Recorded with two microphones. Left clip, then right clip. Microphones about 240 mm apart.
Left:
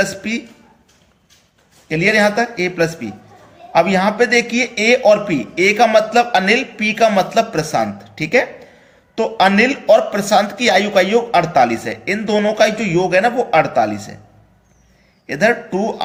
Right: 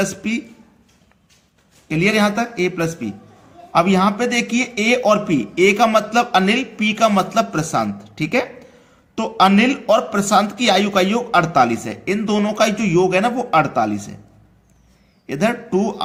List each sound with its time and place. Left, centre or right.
0.0 s a man's voice: right
1.9 s a man's voice: right
15.3 s a man's voice: right